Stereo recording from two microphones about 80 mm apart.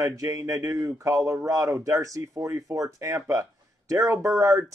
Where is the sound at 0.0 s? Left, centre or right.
Right.